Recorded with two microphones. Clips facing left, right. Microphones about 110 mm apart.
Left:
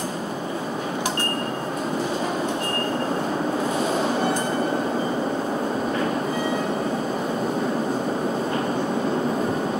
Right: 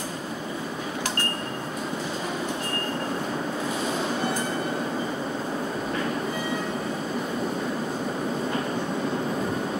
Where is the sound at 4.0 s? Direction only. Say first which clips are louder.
Left 5 dB; 30° left (ahead or behind).